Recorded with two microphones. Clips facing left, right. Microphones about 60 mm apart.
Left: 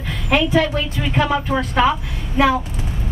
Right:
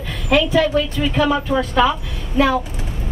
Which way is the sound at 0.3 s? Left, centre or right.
Left.